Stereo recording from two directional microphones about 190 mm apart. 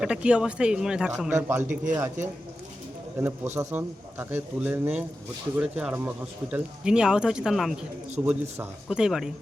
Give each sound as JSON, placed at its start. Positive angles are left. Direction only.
{"t": 0.0, "sound": "speech", "side_deg": -5}
{"t": 1.6, "sound": "speech", "side_deg": -40}
{"t": 3.2, "sound": "a man's voice", "side_deg": -10}